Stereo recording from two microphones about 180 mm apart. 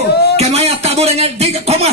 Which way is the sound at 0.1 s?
65° left (ahead or behind).